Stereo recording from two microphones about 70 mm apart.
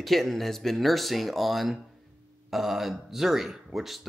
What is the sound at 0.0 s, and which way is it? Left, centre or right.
Speech, centre.